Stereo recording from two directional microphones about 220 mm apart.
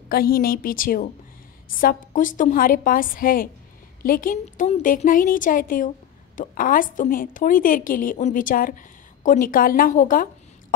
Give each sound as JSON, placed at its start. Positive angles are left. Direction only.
{"t": 0.1, "sound": "a woman's voice", "side_deg": 40}